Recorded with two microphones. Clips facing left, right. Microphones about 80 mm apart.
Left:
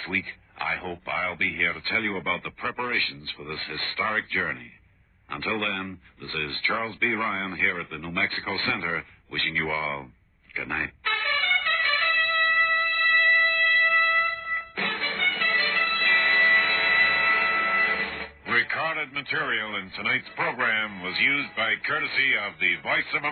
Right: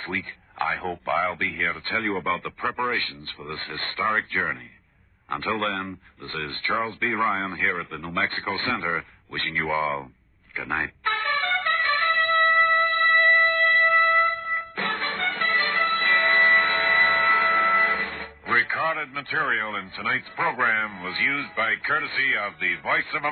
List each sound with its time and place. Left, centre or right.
0.0 s speech: right
10.5 s music: right
19.5 s speech: right
19.8 s speech: right